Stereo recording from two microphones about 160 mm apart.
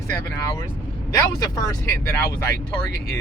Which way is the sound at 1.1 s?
20° left (ahead or behind).